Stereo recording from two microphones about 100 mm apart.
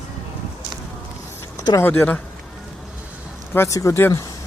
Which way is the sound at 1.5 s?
35° left (ahead or behind).